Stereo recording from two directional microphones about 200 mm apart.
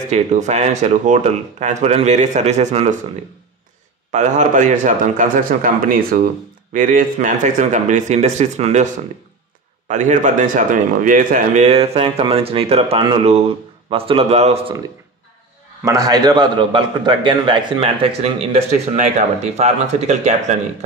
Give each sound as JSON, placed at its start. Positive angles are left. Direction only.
{"t": 0.1, "sound": "a man's voice", "side_deg": -35}
{"t": 4.1, "sound": "a man's voice", "side_deg": -35}
{"t": 15.8, "sound": "a man's voice", "side_deg": -15}